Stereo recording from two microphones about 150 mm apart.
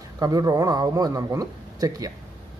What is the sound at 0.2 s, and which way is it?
A man's voice, 25° right (ahead or behind).